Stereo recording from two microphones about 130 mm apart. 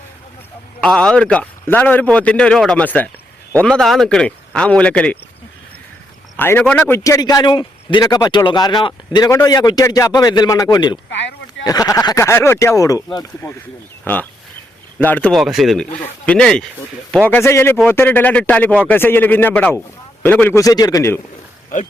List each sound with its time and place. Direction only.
0.8 s a man's voice: 5° left (ahead or behind)
6.3 s a man's voice: 15° left (ahead or behind)
14.0 s a man's voice: 10° left (ahead or behind)
15.3 s a man's voice: centre (ahead or behind)
17.2 s a man's voice: 20° left (ahead or behind)
20.6 s speech: 30° left (ahead or behind)